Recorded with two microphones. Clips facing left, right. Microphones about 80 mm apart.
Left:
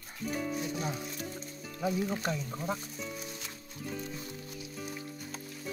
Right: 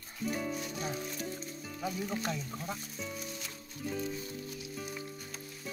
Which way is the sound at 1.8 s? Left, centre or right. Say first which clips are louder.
Left 5 dB; centre.